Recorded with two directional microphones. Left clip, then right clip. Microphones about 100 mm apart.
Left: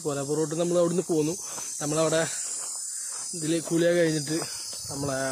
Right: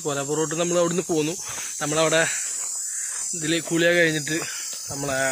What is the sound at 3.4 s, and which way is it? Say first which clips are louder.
Speech: right 3 dB; centre (ahead or behind).